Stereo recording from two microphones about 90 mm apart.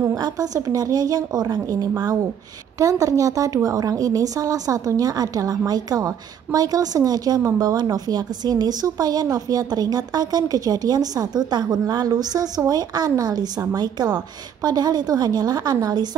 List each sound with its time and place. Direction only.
0.0 s a woman's voice: 40° right (ahead or behind)